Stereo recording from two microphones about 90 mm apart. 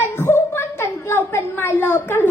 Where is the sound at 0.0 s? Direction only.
25° left (ahead or behind).